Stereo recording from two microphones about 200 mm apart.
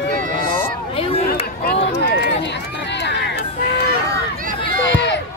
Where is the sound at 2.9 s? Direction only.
60° left (ahead or behind).